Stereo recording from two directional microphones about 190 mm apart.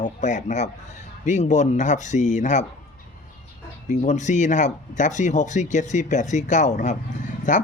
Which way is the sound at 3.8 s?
40° left (ahead or behind).